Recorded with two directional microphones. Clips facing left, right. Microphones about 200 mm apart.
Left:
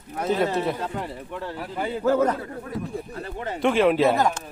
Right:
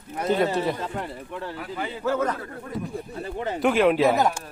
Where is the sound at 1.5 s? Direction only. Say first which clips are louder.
Left 3 dB; 45° left (ahead or behind).